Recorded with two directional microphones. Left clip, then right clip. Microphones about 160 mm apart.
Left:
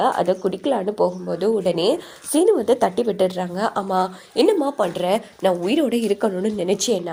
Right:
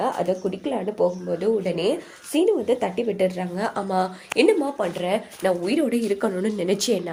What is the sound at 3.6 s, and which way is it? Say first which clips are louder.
Speech: left 3 dB; 15° left (ahead or behind).